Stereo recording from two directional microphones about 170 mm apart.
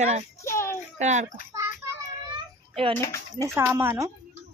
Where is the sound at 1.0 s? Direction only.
45° right (ahead or behind).